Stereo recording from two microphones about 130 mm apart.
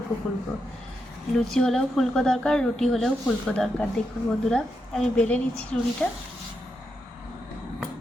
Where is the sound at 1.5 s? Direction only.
5° left (ahead or behind).